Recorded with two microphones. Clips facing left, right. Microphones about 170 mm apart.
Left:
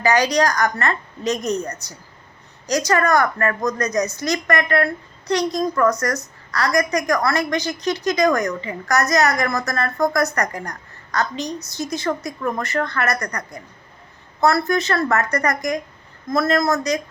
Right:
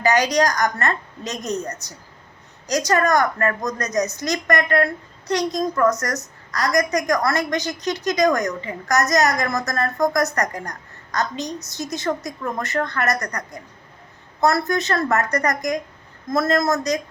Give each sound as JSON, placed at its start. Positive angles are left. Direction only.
{"t": 0.0, "sound": "a woman's voice", "side_deg": -15}
{"t": 2.7, "sound": "a woman's voice", "side_deg": -20}
{"t": 14.4, "sound": "a woman's voice", "side_deg": -20}